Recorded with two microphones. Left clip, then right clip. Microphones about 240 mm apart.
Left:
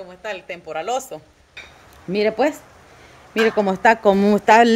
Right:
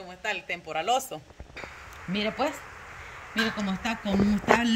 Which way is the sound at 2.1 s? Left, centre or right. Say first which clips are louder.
Left 10 dB; centre.